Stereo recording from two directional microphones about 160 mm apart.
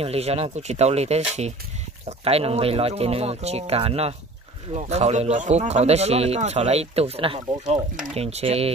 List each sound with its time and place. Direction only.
0.0 s speech: 40° right (ahead or behind)